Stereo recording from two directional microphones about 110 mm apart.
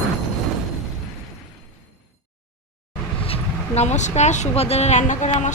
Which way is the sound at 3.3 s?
80° left.